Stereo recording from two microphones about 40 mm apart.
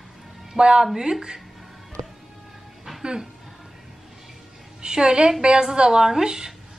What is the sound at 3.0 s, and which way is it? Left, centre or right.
Music, centre.